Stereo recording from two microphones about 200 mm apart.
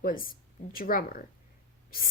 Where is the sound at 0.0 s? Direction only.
45° left (ahead or behind).